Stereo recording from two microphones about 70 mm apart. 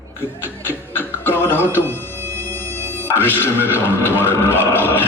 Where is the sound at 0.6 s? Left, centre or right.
Left.